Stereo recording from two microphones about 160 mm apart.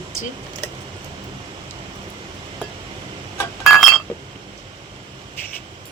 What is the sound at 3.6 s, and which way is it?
Chink, centre (ahead or behind).